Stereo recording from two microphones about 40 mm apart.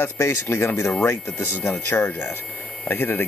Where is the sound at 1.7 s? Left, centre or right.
Left.